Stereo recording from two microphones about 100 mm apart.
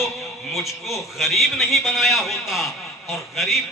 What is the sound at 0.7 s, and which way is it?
Speech, 30° left (ahead or behind).